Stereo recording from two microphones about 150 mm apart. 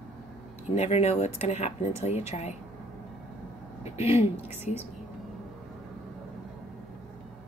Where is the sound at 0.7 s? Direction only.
45° left (ahead or behind).